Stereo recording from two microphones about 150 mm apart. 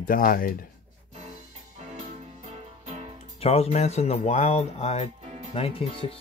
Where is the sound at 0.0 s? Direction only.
70° left (ahead or behind).